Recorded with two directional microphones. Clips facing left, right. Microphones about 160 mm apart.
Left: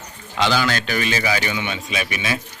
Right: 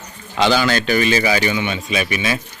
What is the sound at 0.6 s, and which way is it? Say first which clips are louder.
A man's voice: right 5 dB; 5° right (ahead or behind).